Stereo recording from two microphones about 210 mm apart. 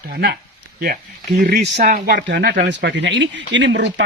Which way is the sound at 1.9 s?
50° right (ahead or behind).